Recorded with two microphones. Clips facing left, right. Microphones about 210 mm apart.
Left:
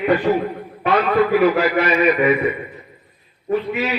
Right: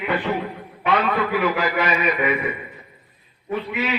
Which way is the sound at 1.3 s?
40° left (ahead or behind).